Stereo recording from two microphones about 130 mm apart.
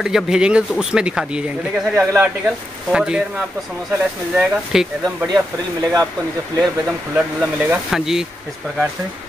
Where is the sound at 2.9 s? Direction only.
5° right (ahead or behind).